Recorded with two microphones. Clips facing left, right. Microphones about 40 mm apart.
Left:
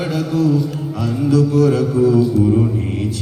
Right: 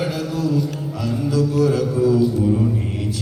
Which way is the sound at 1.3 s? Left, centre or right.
Left.